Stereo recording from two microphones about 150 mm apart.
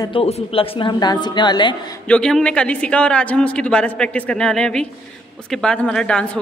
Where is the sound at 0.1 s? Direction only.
35° left (ahead or behind).